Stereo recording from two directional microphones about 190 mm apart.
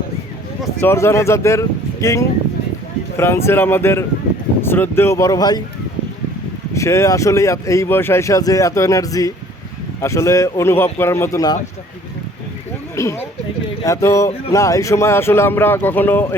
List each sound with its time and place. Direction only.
0.8 s speech: 10° left (ahead or behind)
6.7 s speech: 15° left (ahead or behind)
13.0 s speech: 15° left (ahead or behind)